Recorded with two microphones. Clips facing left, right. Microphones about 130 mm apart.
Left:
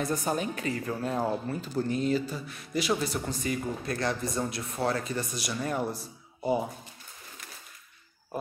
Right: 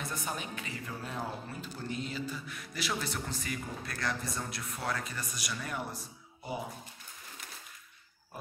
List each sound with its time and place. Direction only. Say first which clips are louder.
0.0 s speech: left 9 dB; 40° left (ahead or behind)
2.7 s speech: left 8 dB; 20° left (ahead or behind); by 6.6 s 40° left (ahead or behind)